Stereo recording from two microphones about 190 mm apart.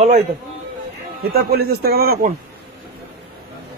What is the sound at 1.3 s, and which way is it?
A man's voice, 55° right (ahead or behind).